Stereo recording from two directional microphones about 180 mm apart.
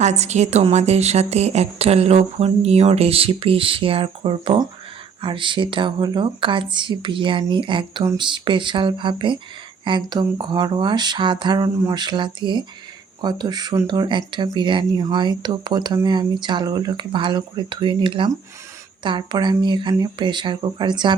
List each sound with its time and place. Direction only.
0.0 s a woman's voice: 40° right (ahead or behind)